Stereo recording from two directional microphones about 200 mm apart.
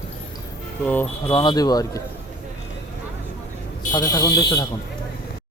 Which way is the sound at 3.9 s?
20° left (ahead or behind).